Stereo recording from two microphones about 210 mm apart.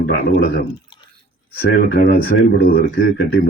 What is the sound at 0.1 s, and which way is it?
Speech, 50° left (ahead or behind).